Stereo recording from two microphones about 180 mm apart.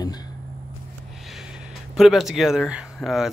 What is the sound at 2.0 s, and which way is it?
Speech, centre (ahead or behind).